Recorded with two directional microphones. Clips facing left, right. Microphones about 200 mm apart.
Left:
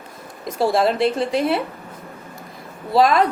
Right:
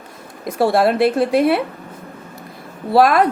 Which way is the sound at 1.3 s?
60° right (ahead or behind).